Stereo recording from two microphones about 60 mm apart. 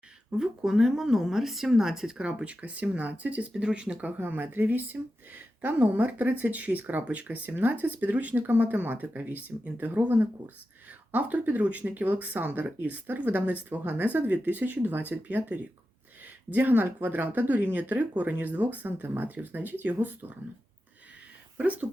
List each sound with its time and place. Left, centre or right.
0.3 s speech: centre
2.1 s speech: centre
4.2 s speech: right
21.6 s speech: right